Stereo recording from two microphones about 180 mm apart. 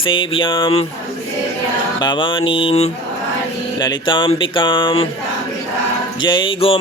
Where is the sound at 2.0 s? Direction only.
25° left (ahead or behind).